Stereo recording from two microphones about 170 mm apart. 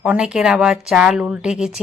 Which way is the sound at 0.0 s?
5° right (ahead or behind).